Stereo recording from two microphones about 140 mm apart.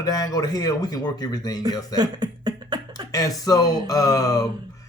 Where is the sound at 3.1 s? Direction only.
25° left (ahead or behind).